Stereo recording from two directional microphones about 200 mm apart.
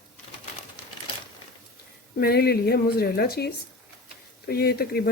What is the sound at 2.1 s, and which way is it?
Speech, 50° left (ahead or behind).